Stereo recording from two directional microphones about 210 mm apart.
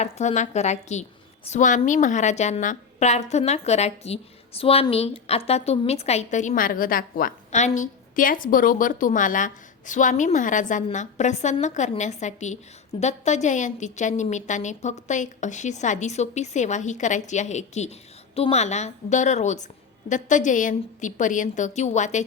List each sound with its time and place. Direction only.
0.0 s a woman's voice: 35° left (ahead or behind)